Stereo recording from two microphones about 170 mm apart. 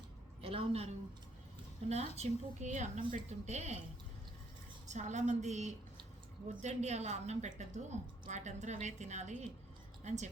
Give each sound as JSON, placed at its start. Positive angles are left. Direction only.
{"t": 0.4, "sound": "a sound", "side_deg": -35}
{"t": 1.9, "sound": "speech", "side_deg": -40}
{"t": 4.9, "sound": "speech", "side_deg": -45}